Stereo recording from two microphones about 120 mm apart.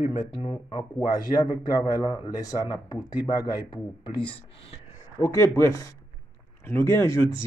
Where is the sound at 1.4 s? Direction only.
25° left (ahead or behind).